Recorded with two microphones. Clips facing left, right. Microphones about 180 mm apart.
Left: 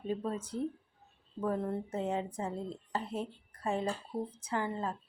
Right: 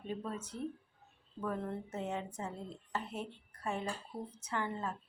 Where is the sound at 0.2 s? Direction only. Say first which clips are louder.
Left 5 dB; 30° left (ahead or behind).